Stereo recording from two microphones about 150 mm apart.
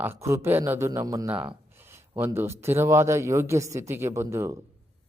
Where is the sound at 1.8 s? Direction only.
15° right (ahead or behind).